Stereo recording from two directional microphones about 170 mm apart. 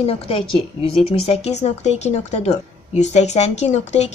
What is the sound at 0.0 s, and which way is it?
Speech, 35° left (ahead or behind).